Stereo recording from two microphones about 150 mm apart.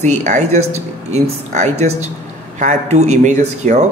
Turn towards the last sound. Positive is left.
turn(degrees=-50)  # may be behind; listen again after turning